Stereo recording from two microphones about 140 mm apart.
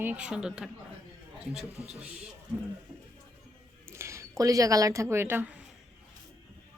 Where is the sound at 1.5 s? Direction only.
5° right (ahead or behind).